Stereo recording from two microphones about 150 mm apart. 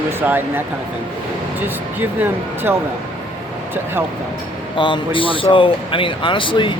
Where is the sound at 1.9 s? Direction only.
15° right (ahead or behind).